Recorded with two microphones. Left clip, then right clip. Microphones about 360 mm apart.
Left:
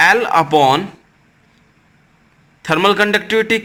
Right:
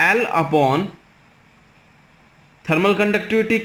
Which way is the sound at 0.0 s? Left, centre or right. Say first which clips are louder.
Left 5 dB; left.